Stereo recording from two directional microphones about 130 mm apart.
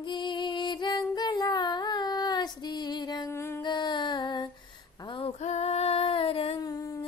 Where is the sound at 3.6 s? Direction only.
35° left (ahead or behind).